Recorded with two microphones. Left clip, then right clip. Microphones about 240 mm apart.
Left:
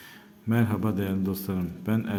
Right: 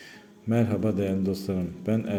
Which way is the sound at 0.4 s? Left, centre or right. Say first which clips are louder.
Right 2 dB; centre.